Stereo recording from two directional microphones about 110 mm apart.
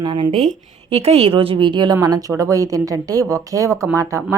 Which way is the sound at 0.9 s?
70° right (ahead or behind).